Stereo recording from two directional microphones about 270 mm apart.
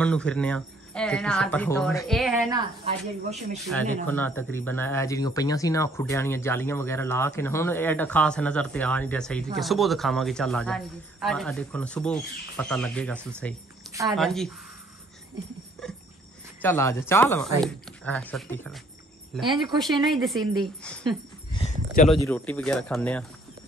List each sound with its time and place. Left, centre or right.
0.0 s speech: centre
2.5 s speech: right
3.3 s speech: centre
16.6 s speech: centre
21.5 s speech: left
22.2 s speech: centre